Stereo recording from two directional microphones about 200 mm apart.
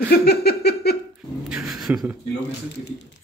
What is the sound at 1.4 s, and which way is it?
Speech, 5° right (ahead or behind).